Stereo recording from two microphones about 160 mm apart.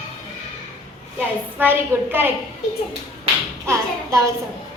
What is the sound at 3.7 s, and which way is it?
Speech, 20° right (ahead or behind).